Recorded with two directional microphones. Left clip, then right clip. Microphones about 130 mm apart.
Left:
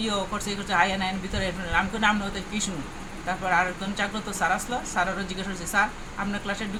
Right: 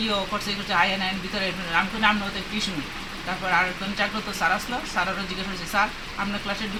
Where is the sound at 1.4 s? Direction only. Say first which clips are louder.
Right 1 dB; 35° left (ahead or behind).